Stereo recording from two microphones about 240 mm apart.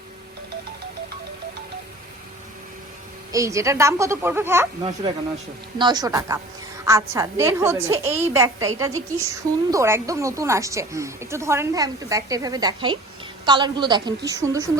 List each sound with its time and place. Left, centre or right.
3.3 s a woman's voice: centre
5.8 s a woman's voice: centre